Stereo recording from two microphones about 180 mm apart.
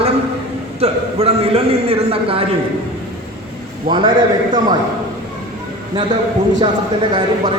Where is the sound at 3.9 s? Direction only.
25° right (ahead or behind).